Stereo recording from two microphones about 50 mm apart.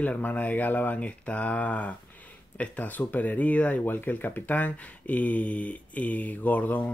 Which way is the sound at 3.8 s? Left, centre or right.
Left.